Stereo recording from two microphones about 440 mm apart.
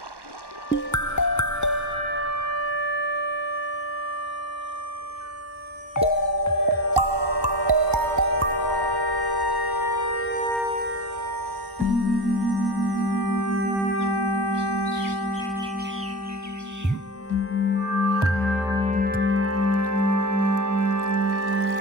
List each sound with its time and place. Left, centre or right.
0.9 s music: left
2.6 s siren: right
3.0 s siren: left
6.0 s music: left
6.6 s music: right
8.5 s music: left
10.5 s music: right
11.8 s chirp tone: right
13.9 s a sound: left
17.3 s music: left
18.0 s music: right
18.4 s music: centre; by 21.4 s right
21.4 s music: left